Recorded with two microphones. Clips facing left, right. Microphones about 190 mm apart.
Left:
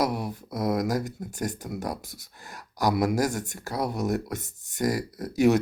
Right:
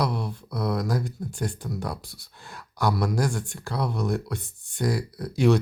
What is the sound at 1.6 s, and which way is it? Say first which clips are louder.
Speech: right 1 dB; 20° left (ahead or behind).